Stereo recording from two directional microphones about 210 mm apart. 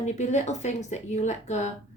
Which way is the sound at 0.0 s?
35° left (ahead or behind).